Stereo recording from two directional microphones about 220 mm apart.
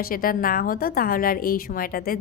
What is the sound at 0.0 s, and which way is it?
A woman's voice, 40° left (ahead or behind).